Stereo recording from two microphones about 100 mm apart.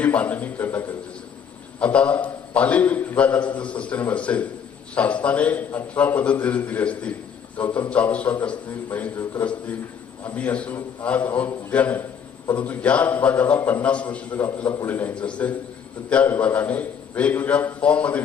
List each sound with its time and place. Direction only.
0.0 s a man's voice: 15° left (ahead or behind)